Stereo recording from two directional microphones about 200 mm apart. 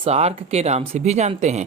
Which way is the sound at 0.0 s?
30° right (ahead or behind).